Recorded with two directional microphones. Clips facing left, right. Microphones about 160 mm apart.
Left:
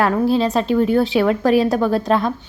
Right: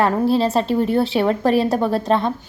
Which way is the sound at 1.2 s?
25° right (ahead or behind).